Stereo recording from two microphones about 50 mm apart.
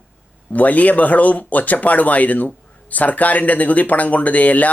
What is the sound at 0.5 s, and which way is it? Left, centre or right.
Speech, left.